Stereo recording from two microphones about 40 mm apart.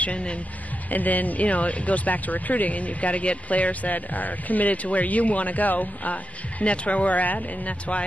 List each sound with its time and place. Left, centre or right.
0.0 s speech: left
0.8 s speech: left
6.6 s speech: left